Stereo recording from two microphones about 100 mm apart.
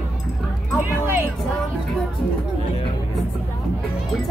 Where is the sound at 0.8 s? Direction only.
20° right (ahead or behind).